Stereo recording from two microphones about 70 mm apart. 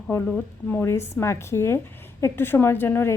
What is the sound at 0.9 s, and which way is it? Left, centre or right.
A woman's voice, left.